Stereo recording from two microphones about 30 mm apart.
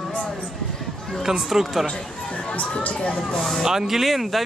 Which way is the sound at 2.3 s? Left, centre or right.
Left.